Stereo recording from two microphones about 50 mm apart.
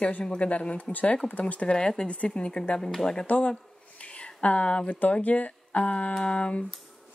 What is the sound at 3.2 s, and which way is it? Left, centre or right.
Speech, left.